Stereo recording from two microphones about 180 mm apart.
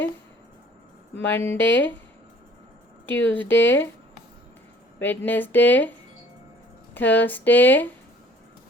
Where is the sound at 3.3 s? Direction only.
10° left (ahead or behind).